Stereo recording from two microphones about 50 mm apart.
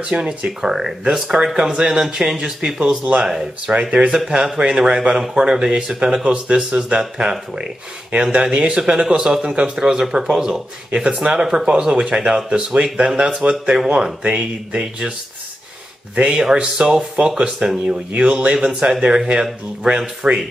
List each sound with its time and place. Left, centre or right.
0.0 s speech: right
0.6 s speech: centre
16.2 s speech: centre
20.2 s speech: right